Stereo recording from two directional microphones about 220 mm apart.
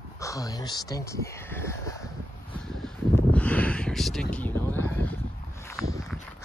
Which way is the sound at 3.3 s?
5° left (ahead or behind).